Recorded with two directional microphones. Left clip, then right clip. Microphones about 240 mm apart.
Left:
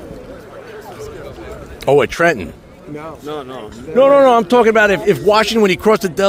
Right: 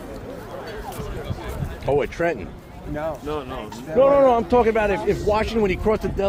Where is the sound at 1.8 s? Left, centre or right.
Left.